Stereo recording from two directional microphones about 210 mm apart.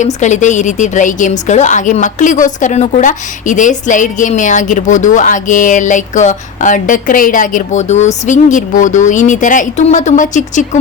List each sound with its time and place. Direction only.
0.0 s a woman's voice: 35° left (ahead or behind)